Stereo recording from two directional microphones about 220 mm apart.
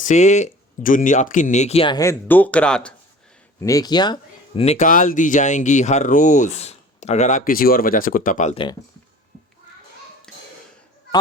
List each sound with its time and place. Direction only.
0.0 s speech: 35° left (ahead or behind); by 2.9 s 5° left (ahead or behind)
3.6 s speech: 15° left (ahead or behind); by 8.6 s 35° left (ahead or behind)
10.3 s a sound: 5° left (ahead or behind)